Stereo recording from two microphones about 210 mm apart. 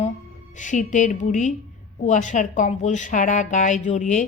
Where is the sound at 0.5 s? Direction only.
35° left (ahead or behind).